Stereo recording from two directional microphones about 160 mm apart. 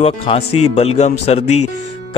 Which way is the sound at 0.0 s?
40° left (ahead or behind).